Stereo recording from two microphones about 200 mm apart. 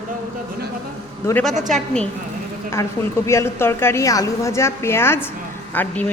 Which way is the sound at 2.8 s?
15° left (ahead or behind).